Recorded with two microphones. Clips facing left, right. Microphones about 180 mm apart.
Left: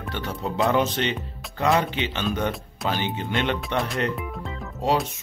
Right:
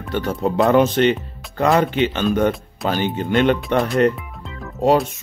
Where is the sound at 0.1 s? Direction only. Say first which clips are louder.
Right 9 dB; 45° right (ahead or behind).